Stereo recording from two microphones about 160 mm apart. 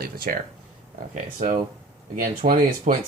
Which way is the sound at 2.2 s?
60° right (ahead or behind).